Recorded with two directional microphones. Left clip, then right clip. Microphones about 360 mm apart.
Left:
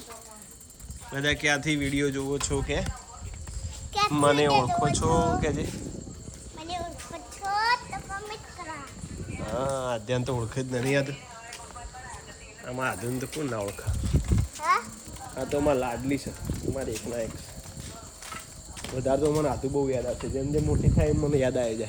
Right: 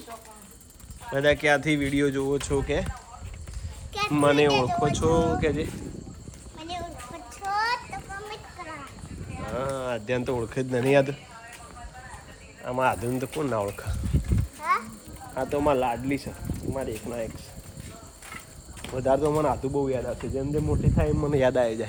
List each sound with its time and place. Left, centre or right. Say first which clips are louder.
1.1 s speech: right 4 dB; centre
3.9 s speech: right 1 dB; centre
6.6 s a sound: even; centre
9.6 s speech: even; centre
12.6 s speech: right 6 dB; centre
14.3 s a sound: left 1 dB; left
15.4 s speech: right 2 dB; centre
18.8 s speech: right 2 dB; centre